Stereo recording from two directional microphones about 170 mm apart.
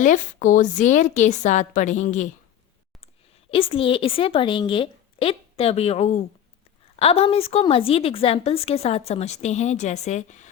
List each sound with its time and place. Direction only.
0.0 s a woman's voice: 50° left (ahead or behind)
3.5 s a woman's voice: 35° left (ahead or behind)